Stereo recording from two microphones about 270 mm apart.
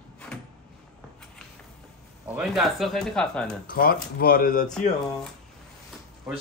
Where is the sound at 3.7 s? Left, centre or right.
Left.